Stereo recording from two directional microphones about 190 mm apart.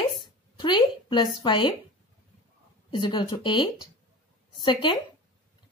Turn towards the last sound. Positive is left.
turn(degrees=25)  # may be behind; listen again after turning